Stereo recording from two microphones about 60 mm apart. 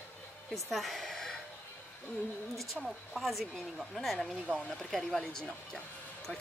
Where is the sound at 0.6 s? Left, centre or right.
Centre.